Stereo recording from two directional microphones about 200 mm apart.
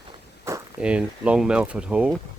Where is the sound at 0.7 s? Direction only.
5° right (ahead or behind).